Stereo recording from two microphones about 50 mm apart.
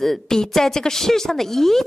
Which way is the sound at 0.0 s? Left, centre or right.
Centre.